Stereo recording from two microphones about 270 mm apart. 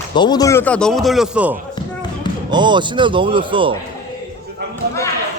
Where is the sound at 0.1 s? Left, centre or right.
Centre.